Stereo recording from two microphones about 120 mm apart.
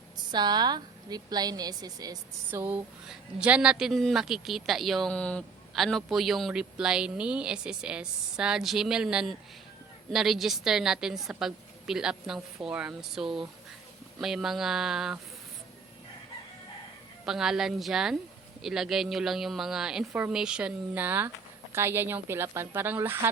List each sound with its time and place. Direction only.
0.3 s a woman's voice: 35° right (ahead or behind)
2.5 s speech: 15° right (ahead or behind)
17.2 s speech: 5° right (ahead or behind); by 23.3 s 20° right (ahead or behind)